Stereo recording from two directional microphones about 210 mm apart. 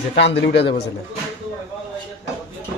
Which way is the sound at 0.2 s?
55° left (ahead or behind).